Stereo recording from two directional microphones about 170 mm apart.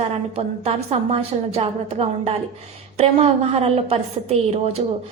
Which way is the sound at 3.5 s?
35° right (ahead or behind).